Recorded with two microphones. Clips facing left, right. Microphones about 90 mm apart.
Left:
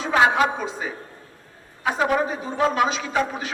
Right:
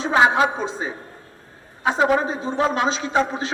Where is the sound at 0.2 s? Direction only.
20° right (ahead or behind).